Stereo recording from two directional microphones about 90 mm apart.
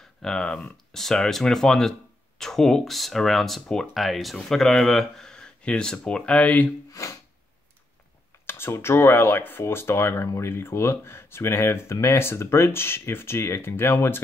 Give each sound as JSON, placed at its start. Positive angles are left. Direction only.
{"t": 0.2, "sound": "speech", "side_deg": 10}
{"t": 6.9, "sound": "a sound", "side_deg": 35}
{"t": 8.5, "sound": "speech", "side_deg": 25}